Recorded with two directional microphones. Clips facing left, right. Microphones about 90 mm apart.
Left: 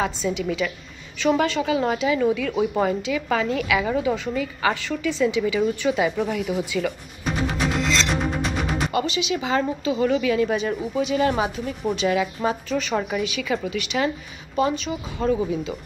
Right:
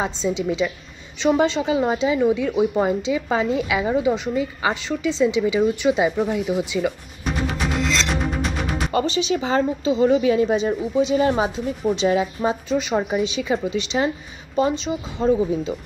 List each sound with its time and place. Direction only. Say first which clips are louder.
0.0 s speech: right 1 dB; 25° right (ahead or behind)
7.2 s music: even; centre (ahead or behind)
8.9 s speech: right 6 dB; 35° right (ahead or behind)